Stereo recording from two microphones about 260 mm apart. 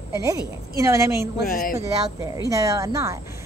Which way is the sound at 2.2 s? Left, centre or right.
Centre.